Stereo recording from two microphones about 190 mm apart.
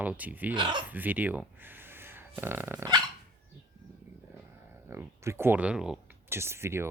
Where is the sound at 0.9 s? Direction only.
10° right (ahead or behind).